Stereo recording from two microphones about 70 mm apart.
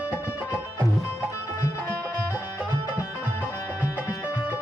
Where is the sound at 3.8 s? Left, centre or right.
Right.